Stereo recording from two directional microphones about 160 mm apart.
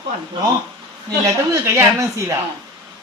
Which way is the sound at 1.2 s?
15° right (ahead or behind).